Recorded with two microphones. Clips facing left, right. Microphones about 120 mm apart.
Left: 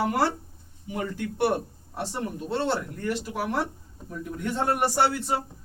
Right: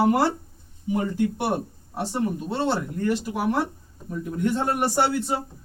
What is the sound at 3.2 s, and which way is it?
Speech, 20° right (ahead or behind).